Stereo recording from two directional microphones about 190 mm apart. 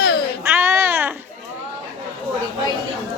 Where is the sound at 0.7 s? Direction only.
15° right (ahead or behind).